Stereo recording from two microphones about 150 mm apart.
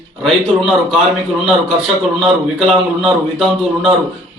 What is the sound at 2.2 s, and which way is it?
A man's voice, centre (ahead or behind).